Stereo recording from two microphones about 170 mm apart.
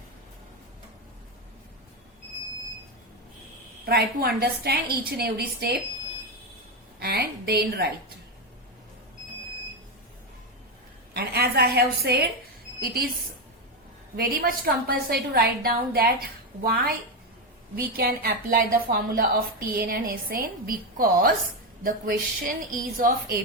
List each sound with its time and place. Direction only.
3.8 s a woman's voice: 65° right (ahead or behind)
7.0 s a woman's voice: 65° right (ahead or behind)
11.1 s a woman's voice: 70° right (ahead or behind)
14.2 s a woman's voice: 60° right (ahead or behind)